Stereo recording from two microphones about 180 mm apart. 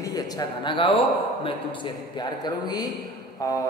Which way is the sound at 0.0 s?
20° left (ahead or behind).